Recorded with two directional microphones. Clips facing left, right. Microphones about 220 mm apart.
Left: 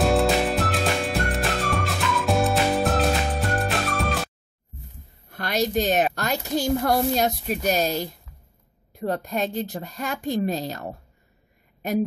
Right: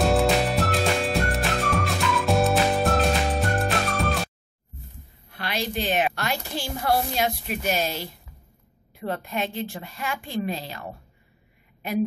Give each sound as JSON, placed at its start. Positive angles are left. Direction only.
{"t": 0.0, "sound": "music", "side_deg": 0}
{"t": 5.3, "sound": "a woman's voice", "side_deg": 45}